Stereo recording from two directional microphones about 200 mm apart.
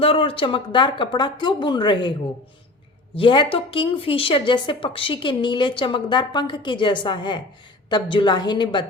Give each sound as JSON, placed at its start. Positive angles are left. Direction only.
{"t": 0.0, "sound": "speech", "side_deg": 25}
{"t": 3.2, "sound": "speech", "side_deg": 25}